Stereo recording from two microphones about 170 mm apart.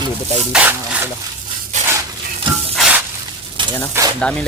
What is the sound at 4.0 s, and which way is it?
Speech, 15° right (ahead or behind).